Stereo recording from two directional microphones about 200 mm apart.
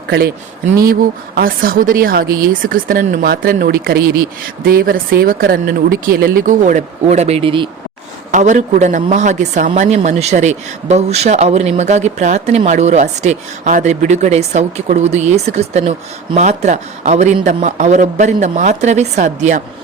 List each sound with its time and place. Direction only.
1.4 s speech: 45° right (ahead or behind); by 7.7 s 25° right (ahead or behind)
8.3 s speech: 40° right (ahead or behind)